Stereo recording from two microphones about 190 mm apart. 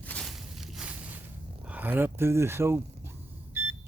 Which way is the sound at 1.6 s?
10° right (ahead or behind).